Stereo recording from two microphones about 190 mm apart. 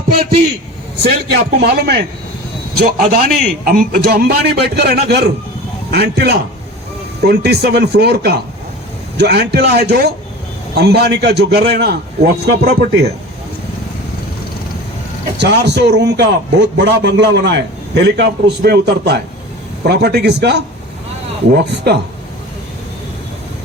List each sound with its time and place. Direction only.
1.3 s a man's voice: 60° right (ahead or behind)
3.1 s a man's voice: 50° right (ahead or behind)
15.4 s a man's voice: 65° right (ahead or behind)